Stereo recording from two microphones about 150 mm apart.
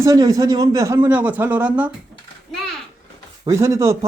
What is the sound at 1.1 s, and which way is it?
Speech, 10° right (ahead or behind).